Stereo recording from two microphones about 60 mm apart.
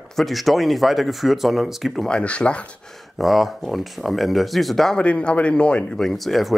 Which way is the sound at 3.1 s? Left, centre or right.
Centre.